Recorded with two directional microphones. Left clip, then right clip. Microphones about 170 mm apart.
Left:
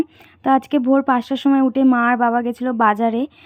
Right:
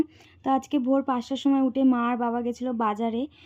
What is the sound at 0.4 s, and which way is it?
Speech, 20° left (ahead or behind).